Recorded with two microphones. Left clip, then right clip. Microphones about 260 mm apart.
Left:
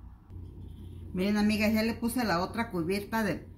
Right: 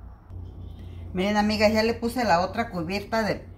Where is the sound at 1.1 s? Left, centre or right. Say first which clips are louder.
Right 6 dB; centre.